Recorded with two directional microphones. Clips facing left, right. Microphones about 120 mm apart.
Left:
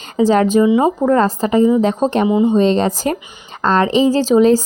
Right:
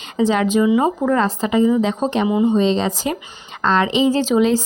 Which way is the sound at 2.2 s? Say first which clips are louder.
Left 2 dB; 25° left (ahead or behind).